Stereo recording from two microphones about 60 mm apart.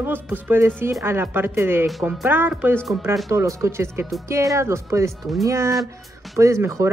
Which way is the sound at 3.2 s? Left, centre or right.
Right.